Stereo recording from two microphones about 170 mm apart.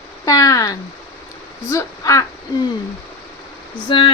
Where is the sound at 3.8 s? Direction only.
30° left (ahead or behind).